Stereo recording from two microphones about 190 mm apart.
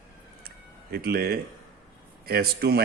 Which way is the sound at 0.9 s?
55° right (ahead or behind).